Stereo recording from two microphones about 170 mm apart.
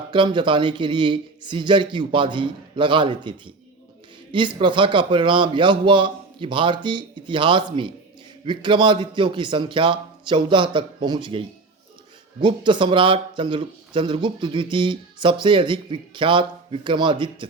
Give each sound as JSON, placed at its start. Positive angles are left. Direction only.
{"t": 0.1, "sound": "speech", "side_deg": -25}